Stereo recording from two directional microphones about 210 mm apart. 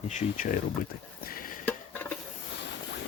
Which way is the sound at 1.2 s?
40° left (ahead or behind).